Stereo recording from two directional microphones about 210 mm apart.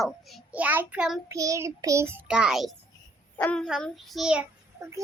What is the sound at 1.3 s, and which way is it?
Child singing, 15° right (ahead or behind).